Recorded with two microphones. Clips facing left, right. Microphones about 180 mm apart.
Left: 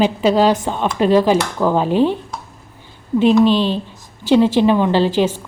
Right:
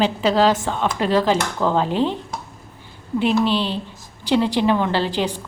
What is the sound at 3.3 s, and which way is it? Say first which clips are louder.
Speech: left 6 dB; 15° left (ahead or behind).